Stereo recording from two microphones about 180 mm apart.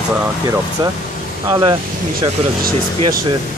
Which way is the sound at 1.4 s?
25° right (ahead or behind).